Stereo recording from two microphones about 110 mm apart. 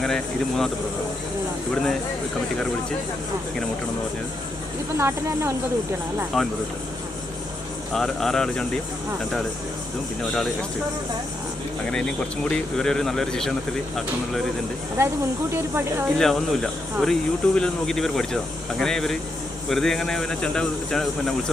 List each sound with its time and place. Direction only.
0.0 s speech: 5° left (ahead or behind)
1.7 s speech: 5° left (ahead or behind)
4.9 s speech: 25° right (ahead or behind)
6.3 s speech: centre (ahead or behind)
7.9 s speech: 5° left (ahead or behind)
10.3 s speech: 10° left (ahead or behind)
12.5 s speech: 5° left (ahead or behind)
14.9 s speech: 25° right (ahead or behind)
16.1 s speech: 5° left (ahead or behind)